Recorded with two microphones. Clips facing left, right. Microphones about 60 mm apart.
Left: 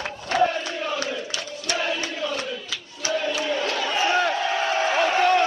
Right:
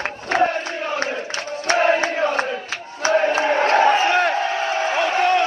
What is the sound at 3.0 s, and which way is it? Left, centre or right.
Crowd, right.